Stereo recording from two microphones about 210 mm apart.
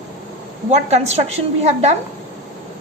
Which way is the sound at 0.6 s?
30° right (ahead or behind).